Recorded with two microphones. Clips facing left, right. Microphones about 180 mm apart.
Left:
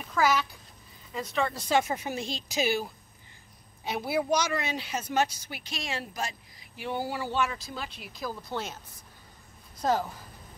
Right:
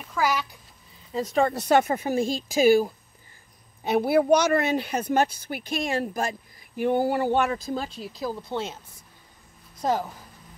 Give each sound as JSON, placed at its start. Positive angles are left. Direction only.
{"t": 0.0, "sound": "a sound", "side_deg": -10}
{"t": 1.1, "sound": "speech", "side_deg": -40}
{"t": 1.5, "sound": "speech", "side_deg": -60}
{"t": 9.8, "sound": "a woman's voice", "side_deg": -20}